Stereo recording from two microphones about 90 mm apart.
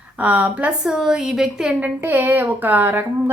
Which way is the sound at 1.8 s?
20° right (ahead or behind).